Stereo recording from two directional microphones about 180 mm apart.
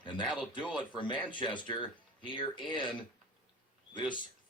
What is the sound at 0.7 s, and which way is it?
A man's voice, 25° left (ahead or behind).